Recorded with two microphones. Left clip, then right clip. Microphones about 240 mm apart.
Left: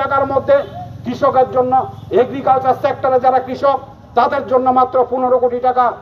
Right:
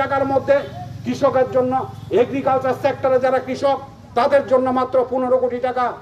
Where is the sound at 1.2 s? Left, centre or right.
Right.